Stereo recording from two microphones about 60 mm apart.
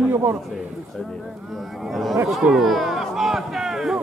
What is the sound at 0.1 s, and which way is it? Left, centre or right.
Speech, right.